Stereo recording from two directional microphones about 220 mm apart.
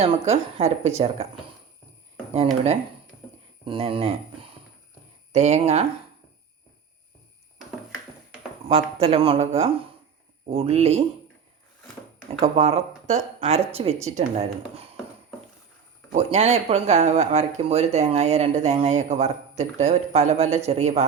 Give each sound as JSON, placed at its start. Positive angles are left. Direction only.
{"t": 0.0, "sound": "speech", "side_deg": -30}
{"t": 2.3, "sound": "speech", "side_deg": -30}
{"t": 5.3, "sound": "speech", "side_deg": -30}
{"t": 8.7, "sound": "speech", "side_deg": -25}
{"t": 12.5, "sound": "speech", "side_deg": -30}
{"t": 16.1, "sound": "speech", "side_deg": -30}